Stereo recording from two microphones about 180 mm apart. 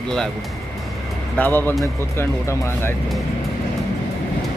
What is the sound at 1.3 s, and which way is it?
Speech, 10° left (ahead or behind).